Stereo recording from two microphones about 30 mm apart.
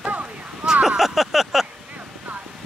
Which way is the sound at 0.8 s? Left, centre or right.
Centre.